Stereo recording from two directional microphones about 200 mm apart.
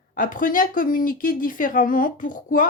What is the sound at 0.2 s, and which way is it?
Speech, 40° left (ahead or behind).